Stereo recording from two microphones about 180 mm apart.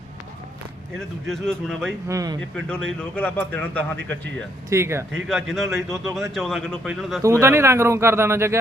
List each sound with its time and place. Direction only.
0.9 s speech: 5° left (ahead or behind)
2.0 s speech: 20° right (ahead or behind)
2.6 s speech: 5° left (ahead or behind)
4.7 s speech: 15° right (ahead or behind)
5.1 s speech: centre (ahead or behind)
7.2 s speech: 15° right (ahead or behind)